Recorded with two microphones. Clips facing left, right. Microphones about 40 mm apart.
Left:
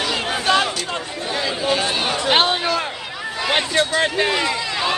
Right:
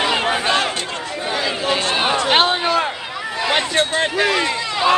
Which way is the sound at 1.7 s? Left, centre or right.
Right.